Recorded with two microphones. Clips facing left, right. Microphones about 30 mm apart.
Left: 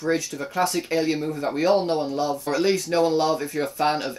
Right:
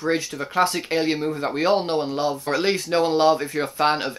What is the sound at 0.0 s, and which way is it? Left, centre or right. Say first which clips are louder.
Speech: right 1 dB; right.